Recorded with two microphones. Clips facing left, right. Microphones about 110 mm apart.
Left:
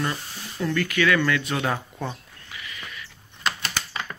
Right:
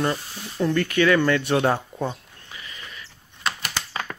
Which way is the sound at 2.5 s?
30° right (ahead or behind).